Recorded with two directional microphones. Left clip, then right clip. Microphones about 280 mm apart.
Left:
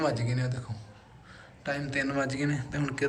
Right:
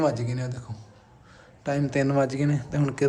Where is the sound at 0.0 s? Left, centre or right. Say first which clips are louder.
Right 4 dB; right.